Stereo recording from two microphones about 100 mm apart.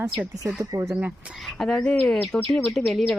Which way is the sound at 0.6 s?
35° right (ahead or behind).